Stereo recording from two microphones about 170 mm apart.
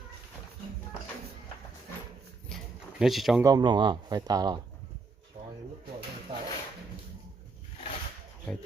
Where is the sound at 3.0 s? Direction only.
Centre (ahead or behind).